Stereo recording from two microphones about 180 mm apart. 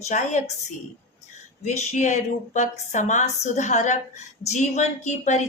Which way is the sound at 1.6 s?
40° left (ahead or behind).